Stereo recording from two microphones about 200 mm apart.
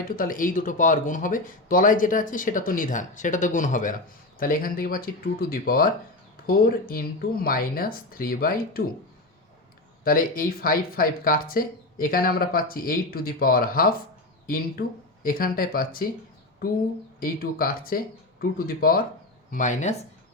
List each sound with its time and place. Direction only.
0.2 s speech: 45° left (ahead or behind)
10.0 s speech: 45° left (ahead or behind)
17.2 s speech: 45° left (ahead or behind)